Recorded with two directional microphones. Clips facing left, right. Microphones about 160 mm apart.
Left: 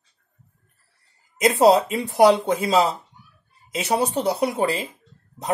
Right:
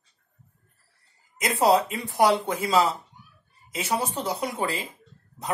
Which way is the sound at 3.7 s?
75° left (ahead or behind).